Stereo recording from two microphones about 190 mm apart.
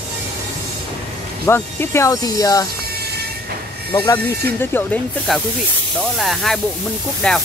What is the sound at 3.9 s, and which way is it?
Speech, 20° left (ahead or behind).